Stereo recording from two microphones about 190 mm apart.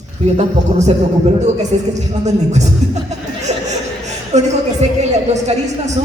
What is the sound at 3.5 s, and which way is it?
Chatter, 35° right (ahead or behind).